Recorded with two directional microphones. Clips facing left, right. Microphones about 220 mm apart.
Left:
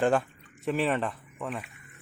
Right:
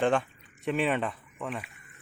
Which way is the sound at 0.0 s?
5° left (ahead or behind).